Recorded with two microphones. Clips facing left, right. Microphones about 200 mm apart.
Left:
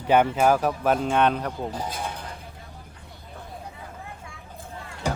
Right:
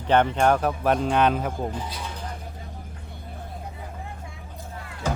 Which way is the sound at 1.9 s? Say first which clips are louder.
Left 3 dB; 55° left (ahead or behind).